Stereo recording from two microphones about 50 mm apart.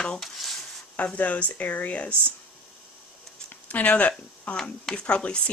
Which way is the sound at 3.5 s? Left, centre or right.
Left.